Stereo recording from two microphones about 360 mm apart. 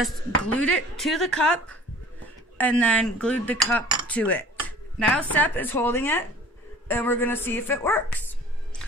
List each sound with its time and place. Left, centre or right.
0.0 s speech: centre